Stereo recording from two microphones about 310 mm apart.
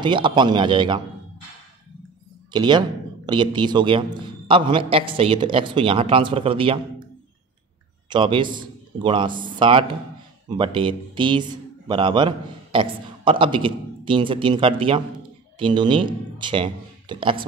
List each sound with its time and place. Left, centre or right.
0.0 s a man's voice: centre
2.5 s a man's voice: centre
8.1 s a man's voice: centre